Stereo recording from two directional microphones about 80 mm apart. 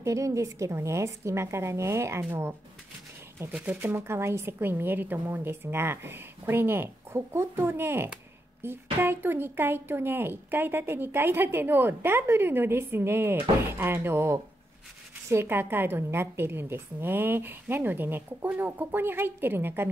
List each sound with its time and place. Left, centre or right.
0.0 s a woman's voice: right
3.6 s a woman's voice: right